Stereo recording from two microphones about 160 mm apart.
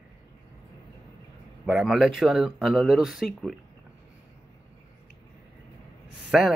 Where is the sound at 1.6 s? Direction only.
Centre (ahead or behind).